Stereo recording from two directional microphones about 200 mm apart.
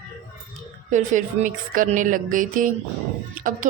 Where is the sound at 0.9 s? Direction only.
40° right (ahead or behind).